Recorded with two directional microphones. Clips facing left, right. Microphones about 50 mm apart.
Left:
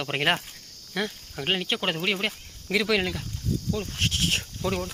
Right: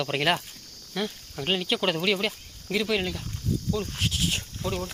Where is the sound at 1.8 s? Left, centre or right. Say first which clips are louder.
Right 2 dB; left.